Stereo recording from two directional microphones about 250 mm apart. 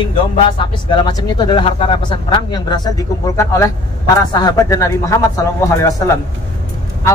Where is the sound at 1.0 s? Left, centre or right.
Centre.